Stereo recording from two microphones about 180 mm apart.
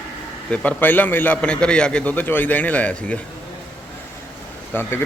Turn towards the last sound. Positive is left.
turn(degrees=15)  # may be behind; listen again after turning